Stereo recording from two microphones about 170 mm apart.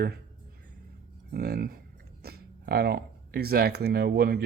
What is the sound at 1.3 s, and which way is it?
Speech, 65° right (ahead or behind).